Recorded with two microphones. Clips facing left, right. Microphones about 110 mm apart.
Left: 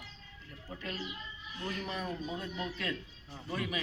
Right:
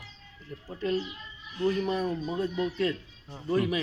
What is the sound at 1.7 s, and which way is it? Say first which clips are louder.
Speech: right 10 dB; 40° right (ahead or behind).